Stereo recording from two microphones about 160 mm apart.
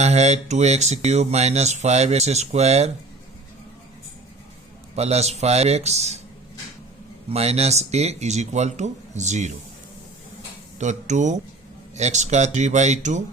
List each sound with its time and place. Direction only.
0.0 s speech: 45° right (ahead or behind)
4.9 s speech: 40° right (ahead or behind)
7.3 s speech: 40° right (ahead or behind)
10.8 s speech: 50° right (ahead or behind)